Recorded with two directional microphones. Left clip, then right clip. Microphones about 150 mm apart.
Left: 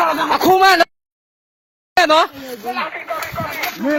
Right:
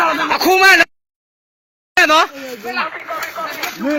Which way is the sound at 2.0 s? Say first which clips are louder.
Right 1 dB; 20° left (ahead or behind).